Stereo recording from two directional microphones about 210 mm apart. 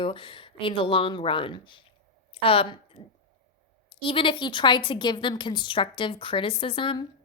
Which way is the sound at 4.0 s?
25° left (ahead or behind).